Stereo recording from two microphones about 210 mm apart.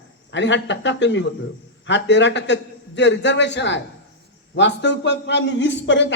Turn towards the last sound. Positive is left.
turn(degrees=60)  # may be behind; listen again after turning